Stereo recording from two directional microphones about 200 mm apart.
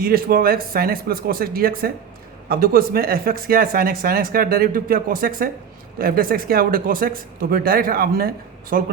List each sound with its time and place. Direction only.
0.0 s speech: 45° right (ahead or behind)